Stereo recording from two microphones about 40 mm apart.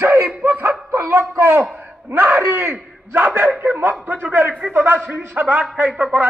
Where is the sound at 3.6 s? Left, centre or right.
Right.